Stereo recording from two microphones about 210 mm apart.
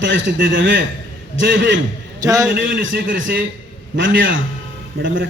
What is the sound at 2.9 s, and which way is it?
Speech, 45° right (ahead or behind).